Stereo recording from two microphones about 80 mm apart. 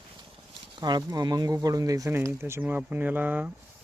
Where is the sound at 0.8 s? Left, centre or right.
Right.